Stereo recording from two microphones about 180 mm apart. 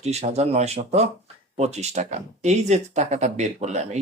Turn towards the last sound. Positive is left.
turn(degrees=-40)  # may be behind; listen again after turning